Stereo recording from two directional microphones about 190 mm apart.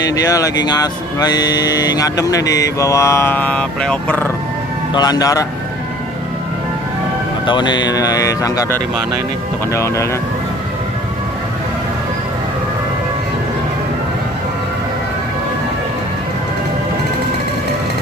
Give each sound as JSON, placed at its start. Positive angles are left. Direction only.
{"t": 0.0, "sound": "speech", "side_deg": 20}
{"t": 4.9, "sound": "speech", "side_deg": 20}
{"t": 7.4, "sound": "speech", "side_deg": 25}